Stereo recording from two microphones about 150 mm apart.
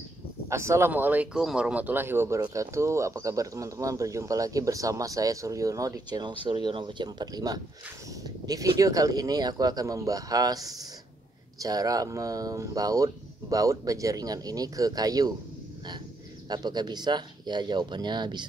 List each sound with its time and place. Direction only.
0.5 s speech: 20° right (ahead or behind)
16.4 s speech: 25° right (ahead or behind)